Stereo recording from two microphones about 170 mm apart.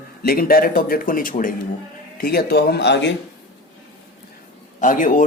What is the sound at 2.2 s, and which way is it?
Speech, 65° left (ahead or behind).